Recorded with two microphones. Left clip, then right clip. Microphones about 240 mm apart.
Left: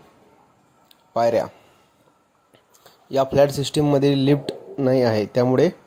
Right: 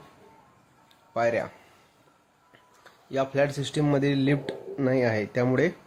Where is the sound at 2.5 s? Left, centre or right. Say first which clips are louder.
Left 2 dB; centre.